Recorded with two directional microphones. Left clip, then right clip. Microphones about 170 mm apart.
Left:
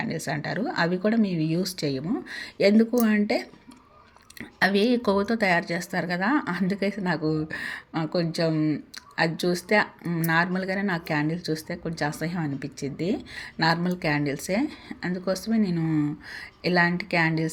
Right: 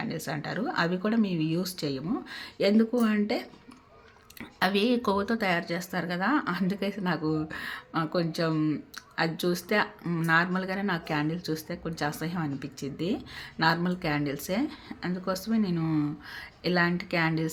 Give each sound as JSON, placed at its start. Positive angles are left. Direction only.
{"t": 0.0, "sound": "speech", "side_deg": 15}